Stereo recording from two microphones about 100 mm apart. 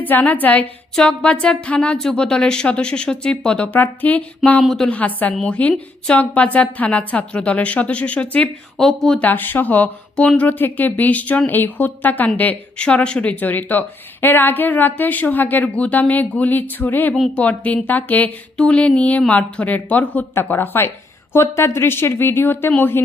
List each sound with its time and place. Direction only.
0.0 s speech: 15° left (ahead or behind)
4.6 s a woman's voice: centre (ahead or behind)
4.9 s speech: 15° left (ahead or behind)
9.2 s speech: 20° left (ahead or behind)